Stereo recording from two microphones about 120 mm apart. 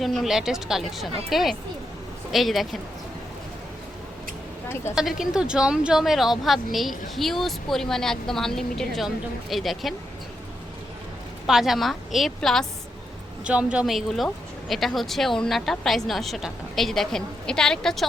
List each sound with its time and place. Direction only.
0.0 s speech: centre (ahead or behind)
4.9 s speech: 5° right (ahead or behind)
11.4 s speech: centre (ahead or behind)
13.4 s speech: 10° right (ahead or behind)